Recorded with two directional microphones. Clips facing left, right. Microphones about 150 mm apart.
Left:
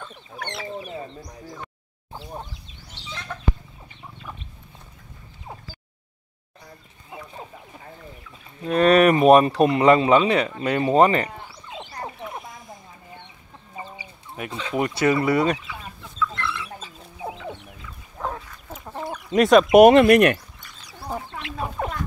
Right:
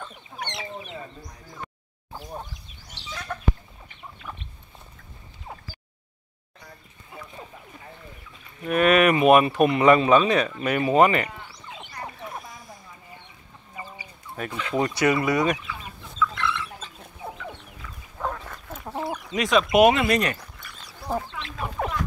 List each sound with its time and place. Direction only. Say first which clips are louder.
3.3 s chicken: right 2 dB; 5° right (ahead or behind)
8.6 s speech: left 3 dB; 35° left (ahead or behind)
13.7 s speech: left 2 dB; 25° left (ahead or behind)
16.2 s chicken: right 1 dB; 5° left (ahead or behind)
18.9 s chicken: right 2 dB; 10° right (ahead or behind)
19.3 s speech: left 7 dB; 50° left (ahead or behind)
21.8 s a sound: right 1 dB; 5° right (ahead or behind)